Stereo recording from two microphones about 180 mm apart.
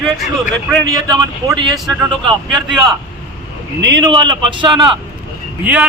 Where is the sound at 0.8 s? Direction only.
20° right (ahead or behind).